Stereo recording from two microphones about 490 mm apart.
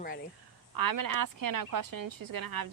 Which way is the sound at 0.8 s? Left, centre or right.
Right.